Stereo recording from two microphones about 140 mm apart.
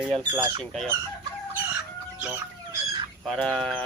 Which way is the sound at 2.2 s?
10° right (ahead or behind).